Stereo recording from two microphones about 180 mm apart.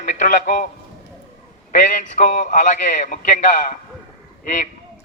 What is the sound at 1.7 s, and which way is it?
A man's voice, 45° left (ahead or behind).